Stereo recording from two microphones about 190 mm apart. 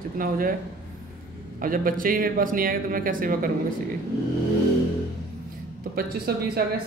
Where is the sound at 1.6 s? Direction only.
45° right (ahead or behind).